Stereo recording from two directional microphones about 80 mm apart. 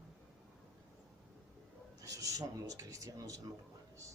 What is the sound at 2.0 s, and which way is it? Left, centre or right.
Speech, right.